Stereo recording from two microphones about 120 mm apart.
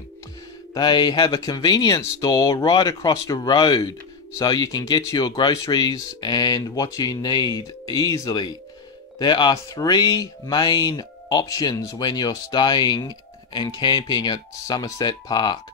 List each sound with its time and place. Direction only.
0.7 s speech: 35° left (ahead or behind)